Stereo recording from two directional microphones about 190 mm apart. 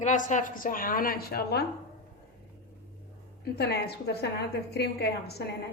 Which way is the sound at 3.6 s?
60° left (ahead or behind).